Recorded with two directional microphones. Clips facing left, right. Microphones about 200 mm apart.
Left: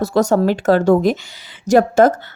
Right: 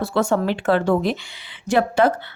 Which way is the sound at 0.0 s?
40° left (ahead or behind).